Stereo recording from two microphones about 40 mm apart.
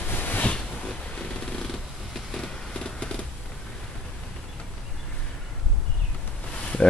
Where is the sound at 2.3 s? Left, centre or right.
Centre.